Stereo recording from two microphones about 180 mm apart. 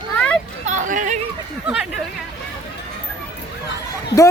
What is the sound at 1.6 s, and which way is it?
Speech, 5° right (ahead or behind).